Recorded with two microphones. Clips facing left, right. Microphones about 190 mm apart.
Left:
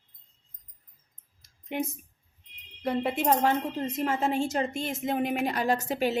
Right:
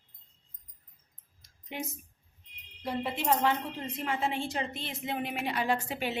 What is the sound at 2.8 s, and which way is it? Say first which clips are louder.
A woman's voice: left 4 dB; 50° left (ahead or behind).